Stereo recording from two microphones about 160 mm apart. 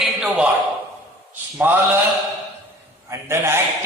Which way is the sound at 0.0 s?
5° right (ahead or behind).